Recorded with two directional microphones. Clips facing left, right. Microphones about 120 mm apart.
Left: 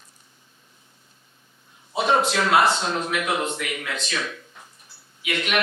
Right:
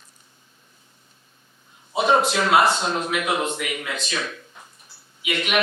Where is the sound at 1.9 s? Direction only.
15° right (ahead or behind).